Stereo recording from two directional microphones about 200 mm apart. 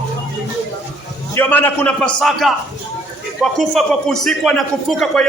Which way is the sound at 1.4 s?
10° left (ahead or behind).